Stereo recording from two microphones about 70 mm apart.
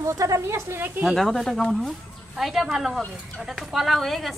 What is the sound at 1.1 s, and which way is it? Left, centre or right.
A woman's voice, centre.